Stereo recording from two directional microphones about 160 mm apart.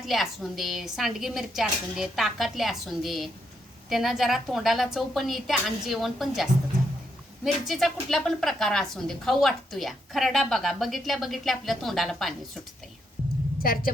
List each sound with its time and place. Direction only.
0.0 s a woman's voice: centre (ahead or behind)
7.7 s a woman's voice: centre (ahead or behind)
13.6 s a woman's voice: 65° left (ahead or behind)